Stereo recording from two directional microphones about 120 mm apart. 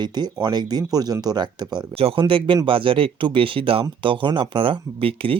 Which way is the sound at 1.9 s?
50° right (ahead or behind).